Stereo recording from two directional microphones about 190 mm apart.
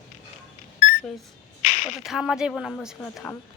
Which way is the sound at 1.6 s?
40° left (ahead or behind).